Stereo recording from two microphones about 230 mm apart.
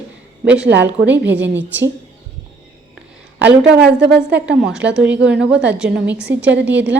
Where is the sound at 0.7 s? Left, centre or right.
Right.